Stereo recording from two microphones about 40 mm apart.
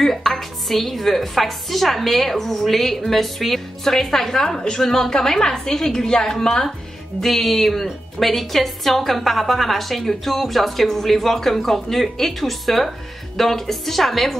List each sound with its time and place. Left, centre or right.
0.0 s a woman's voice: centre